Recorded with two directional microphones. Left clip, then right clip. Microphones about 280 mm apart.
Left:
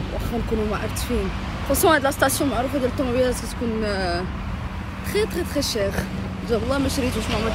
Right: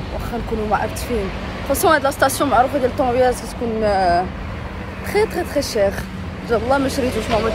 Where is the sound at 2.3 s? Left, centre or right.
Centre.